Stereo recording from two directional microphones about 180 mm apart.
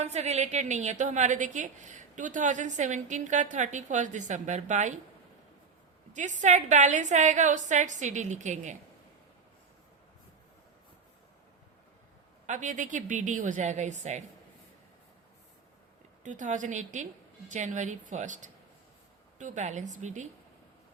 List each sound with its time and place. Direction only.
0.0 s a woman's voice: 40° right (ahead or behind)
6.4 s a woman's voice: 40° right (ahead or behind)
12.5 s a woman's voice: 40° right (ahead or behind)
16.2 s a woman's voice: 45° right (ahead or behind)